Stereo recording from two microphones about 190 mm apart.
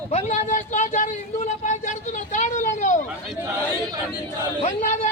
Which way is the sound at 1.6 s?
40° left (ahead or behind).